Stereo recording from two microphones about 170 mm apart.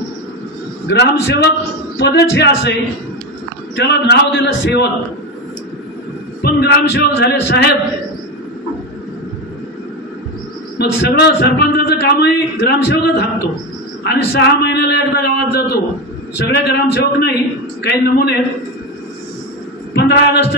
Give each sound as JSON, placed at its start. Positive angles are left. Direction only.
{"t": 0.8, "sound": "speech", "side_deg": 85}
{"t": 3.7, "sound": "a man's voice", "side_deg": 90}
{"t": 6.4, "sound": "a man's voice", "side_deg": 75}
{"t": 10.8, "sound": "a man's voice", "side_deg": 80}
{"t": 16.3, "sound": "a man's voice", "side_deg": 90}
{"t": 19.9, "sound": "a man's voice", "side_deg": 80}